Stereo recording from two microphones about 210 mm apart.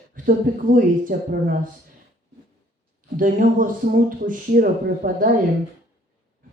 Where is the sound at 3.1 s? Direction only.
40° right (ahead or behind).